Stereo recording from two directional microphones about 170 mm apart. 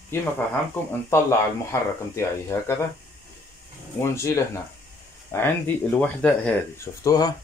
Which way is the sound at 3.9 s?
15° left (ahead or behind).